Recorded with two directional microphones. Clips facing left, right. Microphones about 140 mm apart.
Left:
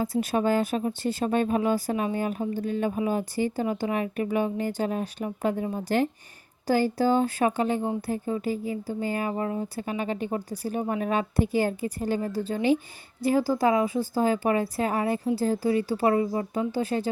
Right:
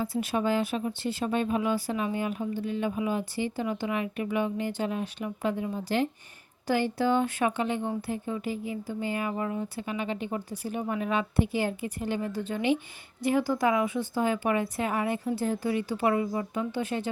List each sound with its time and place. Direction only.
0.0 s a woman's voice: 40° left (ahead or behind)